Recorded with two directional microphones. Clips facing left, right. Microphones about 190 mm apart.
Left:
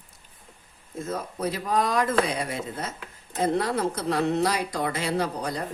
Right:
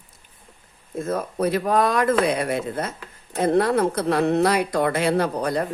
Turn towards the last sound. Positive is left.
turn(degrees=-60)  # may be behind; listen again after turning